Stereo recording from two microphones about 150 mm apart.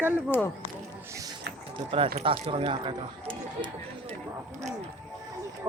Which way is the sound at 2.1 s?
45° right (ahead or behind).